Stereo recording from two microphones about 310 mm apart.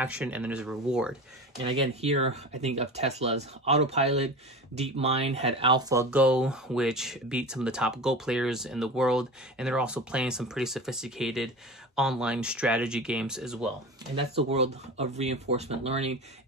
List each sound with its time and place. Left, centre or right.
0.0 s speech: centre
2.0 s speech: centre
14.1 s speech: centre